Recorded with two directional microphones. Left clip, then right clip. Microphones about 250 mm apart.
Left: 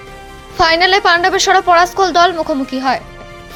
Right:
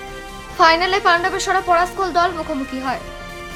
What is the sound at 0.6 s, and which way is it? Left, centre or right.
A woman's voice, centre.